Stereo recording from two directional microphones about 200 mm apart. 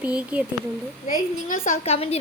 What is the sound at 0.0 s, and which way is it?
Speech, 5° right (ahead or behind).